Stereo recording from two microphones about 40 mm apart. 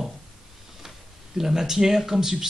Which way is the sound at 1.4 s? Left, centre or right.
Centre.